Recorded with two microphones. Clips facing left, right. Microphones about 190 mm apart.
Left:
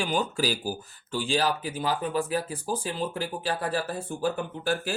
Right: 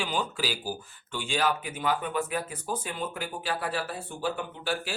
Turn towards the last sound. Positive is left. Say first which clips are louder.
# left 4 dB
turn(degrees=45)  # may be behind; listen again after turning